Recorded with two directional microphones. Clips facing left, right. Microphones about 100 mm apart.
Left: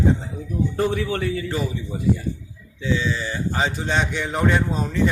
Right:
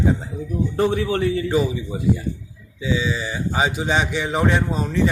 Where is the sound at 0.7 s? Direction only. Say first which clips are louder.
Right 4 dB; 25° right (ahead or behind).